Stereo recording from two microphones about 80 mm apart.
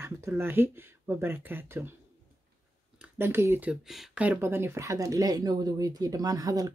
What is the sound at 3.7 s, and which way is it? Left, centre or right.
Speech, centre.